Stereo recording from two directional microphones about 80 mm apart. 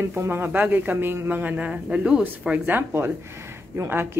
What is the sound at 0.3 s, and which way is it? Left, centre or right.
Speech, right.